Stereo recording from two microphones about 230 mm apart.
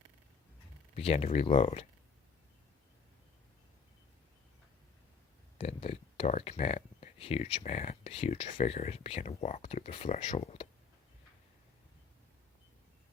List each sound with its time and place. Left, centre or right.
0.9 s speech: left
5.5 s speech: left